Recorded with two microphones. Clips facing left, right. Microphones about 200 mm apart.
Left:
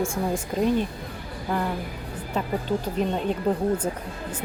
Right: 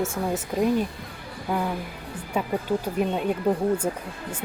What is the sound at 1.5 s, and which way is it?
Speech, 5° right (ahead or behind).